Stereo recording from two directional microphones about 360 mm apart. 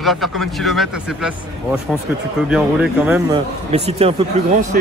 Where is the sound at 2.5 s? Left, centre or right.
Centre.